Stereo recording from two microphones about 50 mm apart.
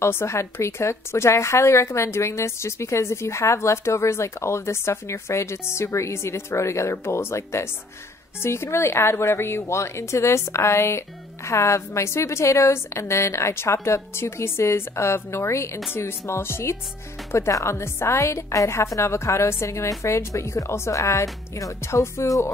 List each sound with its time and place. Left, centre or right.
0.0 s a woman's voice: left
15.9 s music: left
17.3 s a woman's voice: left